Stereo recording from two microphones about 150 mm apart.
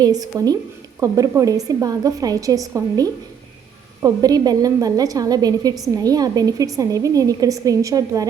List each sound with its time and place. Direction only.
0.0 s a woman's voice: 25° right (ahead or behind)